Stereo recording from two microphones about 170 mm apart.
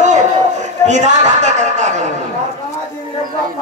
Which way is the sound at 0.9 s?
45° right (ahead or behind).